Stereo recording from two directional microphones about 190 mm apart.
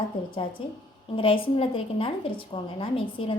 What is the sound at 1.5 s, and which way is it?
Speech, 30° left (ahead or behind).